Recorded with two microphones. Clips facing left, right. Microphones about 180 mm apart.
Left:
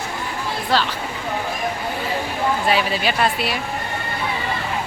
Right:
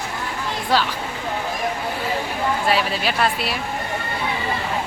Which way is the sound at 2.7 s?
Centre (ahead or behind).